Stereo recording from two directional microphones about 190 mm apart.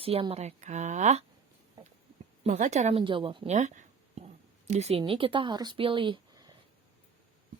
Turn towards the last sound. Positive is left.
turn(degrees=-25)  # may be behind; listen again after turning